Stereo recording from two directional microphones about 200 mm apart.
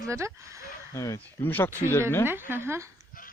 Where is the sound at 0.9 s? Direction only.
15° left (ahead or behind).